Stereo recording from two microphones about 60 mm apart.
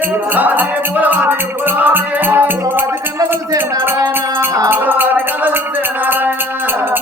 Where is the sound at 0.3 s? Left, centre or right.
Right.